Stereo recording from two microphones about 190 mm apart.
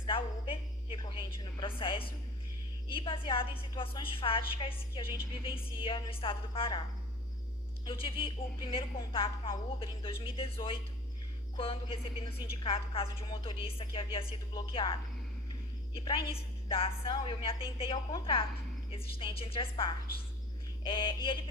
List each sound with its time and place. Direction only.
0.0 s a sound: 30° left (ahead or behind)
1.8 s a woman's voice: 25° left (ahead or behind)
7.9 s a woman's voice: 30° left (ahead or behind)
16.0 s a woman's voice: 30° left (ahead or behind)
20.8 s a woman's voice: 25° left (ahead or behind)